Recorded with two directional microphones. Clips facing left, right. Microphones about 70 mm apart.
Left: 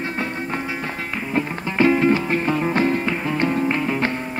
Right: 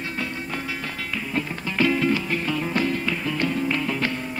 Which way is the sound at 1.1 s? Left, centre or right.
Left.